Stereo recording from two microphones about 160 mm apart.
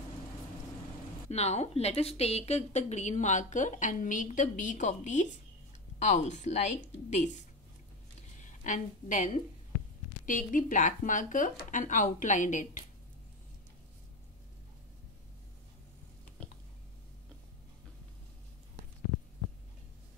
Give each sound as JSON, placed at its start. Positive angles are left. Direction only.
{"t": 1.3, "sound": "speech", "side_deg": 45}
{"t": 8.4, "sound": "a woman's voice", "side_deg": 50}